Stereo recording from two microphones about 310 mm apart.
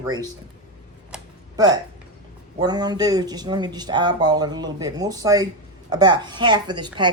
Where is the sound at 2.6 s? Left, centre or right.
Centre.